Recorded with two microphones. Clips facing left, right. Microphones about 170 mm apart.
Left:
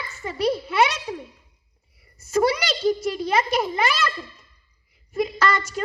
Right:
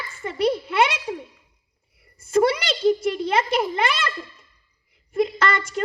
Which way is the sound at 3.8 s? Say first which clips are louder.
Left 1 dB; 25° right (ahead or behind).